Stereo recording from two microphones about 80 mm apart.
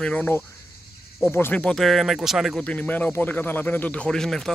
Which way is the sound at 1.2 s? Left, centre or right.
Left.